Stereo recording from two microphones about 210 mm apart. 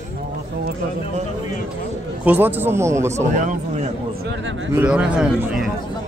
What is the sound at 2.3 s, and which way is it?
Speech, 10° right (ahead or behind).